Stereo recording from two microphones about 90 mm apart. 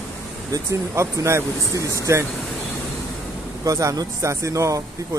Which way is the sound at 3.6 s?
40° right (ahead or behind).